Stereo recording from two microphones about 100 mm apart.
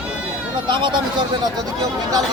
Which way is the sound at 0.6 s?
50° right (ahead or behind).